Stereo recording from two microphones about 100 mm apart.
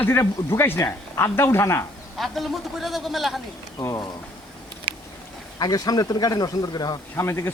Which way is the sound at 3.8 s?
35° left (ahead or behind).